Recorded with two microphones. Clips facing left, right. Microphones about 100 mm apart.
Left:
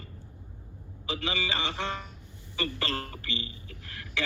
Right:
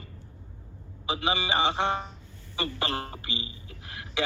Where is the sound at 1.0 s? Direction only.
20° right (ahead or behind).